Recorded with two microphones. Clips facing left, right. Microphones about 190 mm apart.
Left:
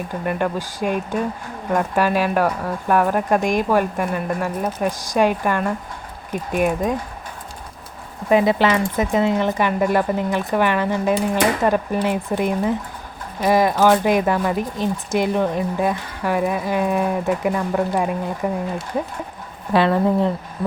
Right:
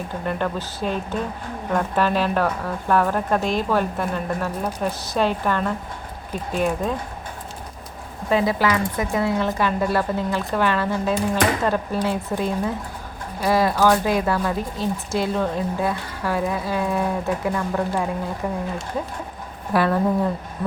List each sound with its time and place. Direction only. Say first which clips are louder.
0.3 s speech: left 3 dB; 15° left (ahead or behind)
8.3 s speech: left 4 dB; 20° left (ahead or behind)
19.7 s speech: left 3 dB; 25° left (ahead or behind)